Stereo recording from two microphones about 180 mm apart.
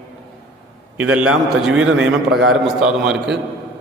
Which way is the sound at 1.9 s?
85° right.